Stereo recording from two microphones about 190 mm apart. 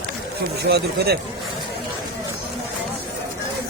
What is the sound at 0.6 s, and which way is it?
Speech, 60° right (ahead or behind).